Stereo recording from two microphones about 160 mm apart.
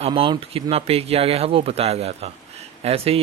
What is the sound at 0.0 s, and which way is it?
A man's voice, 30° right (ahead or behind).